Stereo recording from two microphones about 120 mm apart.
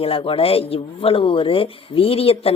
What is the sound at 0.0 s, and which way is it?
Speech, 50° left (ahead or behind).